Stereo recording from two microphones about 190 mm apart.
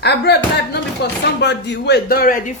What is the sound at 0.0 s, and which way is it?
Speech, 60° left (ahead or behind).